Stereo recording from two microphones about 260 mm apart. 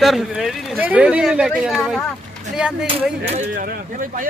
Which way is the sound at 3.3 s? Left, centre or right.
Right.